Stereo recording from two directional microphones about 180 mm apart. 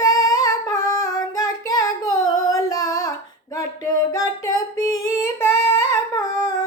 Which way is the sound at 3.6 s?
20° left (ahead or behind).